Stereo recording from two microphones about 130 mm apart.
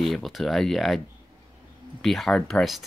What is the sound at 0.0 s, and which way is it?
Speech, centre (ahead or behind).